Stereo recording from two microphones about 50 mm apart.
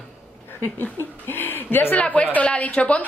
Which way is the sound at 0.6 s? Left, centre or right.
Left.